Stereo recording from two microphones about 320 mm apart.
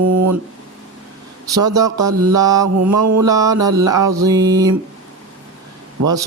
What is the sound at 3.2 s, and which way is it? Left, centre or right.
Mantra, centre.